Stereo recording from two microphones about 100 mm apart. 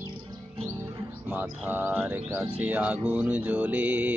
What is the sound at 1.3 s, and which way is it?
Music, 20° right (ahead or behind).